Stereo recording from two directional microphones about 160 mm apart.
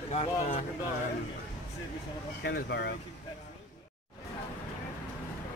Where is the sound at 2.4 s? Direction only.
90° left.